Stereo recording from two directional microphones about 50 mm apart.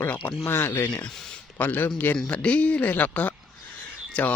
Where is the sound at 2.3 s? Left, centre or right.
Left.